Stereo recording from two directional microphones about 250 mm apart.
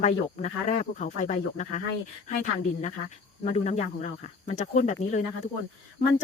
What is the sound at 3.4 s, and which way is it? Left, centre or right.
Speech, left.